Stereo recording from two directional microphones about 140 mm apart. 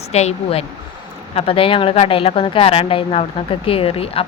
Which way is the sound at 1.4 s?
40° left (ahead or behind).